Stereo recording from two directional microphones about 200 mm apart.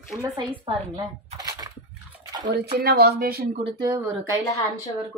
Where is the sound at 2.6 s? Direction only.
50° right (ahead or behind).